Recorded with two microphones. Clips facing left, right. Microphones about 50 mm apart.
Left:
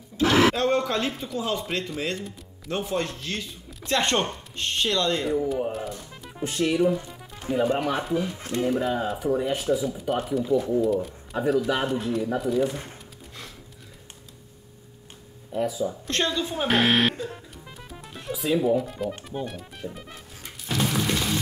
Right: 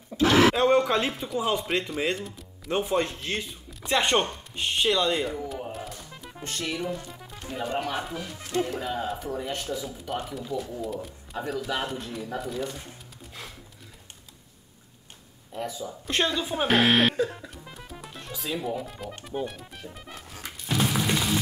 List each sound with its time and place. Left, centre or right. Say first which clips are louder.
0.1 s a sound: even; right
0.6 s speech: right 2 dB; centre
2.1 s speech: left 1 dB; centre
2.7 s speech: right 2 dB; centre
3.9 s speech: even; centre
5.7 s speech: left 5 dB; centre
7.1 s music: left 1 dB; centre
7.4 s speech: left 6 dB; centre
15.5 s speech: left 7 dB; centre
16.1 s speech: right 3 dB; centre
16.6 s speech: even; centre
17.6 s music: even; centre
19.2 s speech: even; centre
20.6 s a sound: even; centre